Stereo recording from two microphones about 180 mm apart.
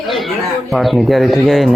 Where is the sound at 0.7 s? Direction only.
Centre (ahead or behind).